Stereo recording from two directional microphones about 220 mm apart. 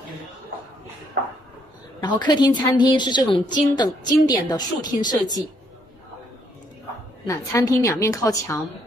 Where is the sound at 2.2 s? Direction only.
20° left (ahead or behind).